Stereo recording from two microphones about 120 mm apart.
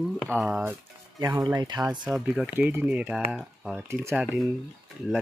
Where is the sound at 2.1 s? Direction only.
5° right (ahead or behind).